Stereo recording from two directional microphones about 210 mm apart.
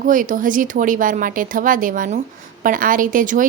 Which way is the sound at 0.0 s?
40° right (ahead or behind).